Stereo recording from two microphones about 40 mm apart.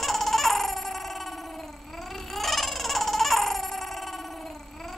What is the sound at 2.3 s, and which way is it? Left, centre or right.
Baby cry, centre.